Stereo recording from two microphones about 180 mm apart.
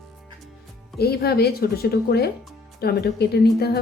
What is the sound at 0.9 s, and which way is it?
Speech, 60° left (ahead or behind).